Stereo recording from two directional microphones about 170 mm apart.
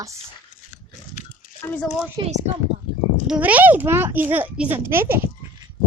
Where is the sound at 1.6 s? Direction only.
5° left (ahead or behind).